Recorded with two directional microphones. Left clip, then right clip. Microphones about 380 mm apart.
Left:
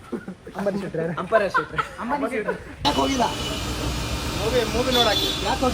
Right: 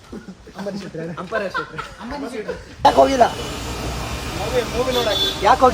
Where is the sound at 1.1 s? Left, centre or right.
Left.